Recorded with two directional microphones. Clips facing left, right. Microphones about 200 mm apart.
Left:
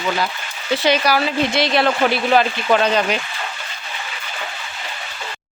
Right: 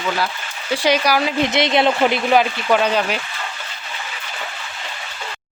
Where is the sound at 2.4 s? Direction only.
5° right (ahead or behind).